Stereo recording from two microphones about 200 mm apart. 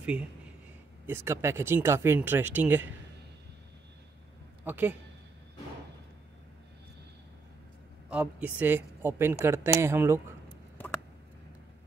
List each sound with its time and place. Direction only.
0.0 s a man's voice: 5° right (ahead or behind)
4.6 s speech: 10° right (ahead or behind)
8.1 s speech: 5° right (ahead or behind)